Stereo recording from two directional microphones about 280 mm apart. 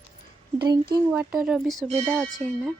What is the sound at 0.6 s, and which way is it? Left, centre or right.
Speech, centre.